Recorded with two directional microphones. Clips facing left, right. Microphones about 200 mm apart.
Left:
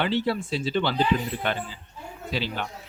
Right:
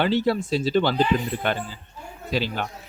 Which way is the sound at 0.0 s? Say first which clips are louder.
Right 4 dB; 40° right (ahead or behind).